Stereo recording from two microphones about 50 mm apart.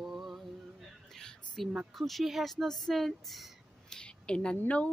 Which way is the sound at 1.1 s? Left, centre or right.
Centre.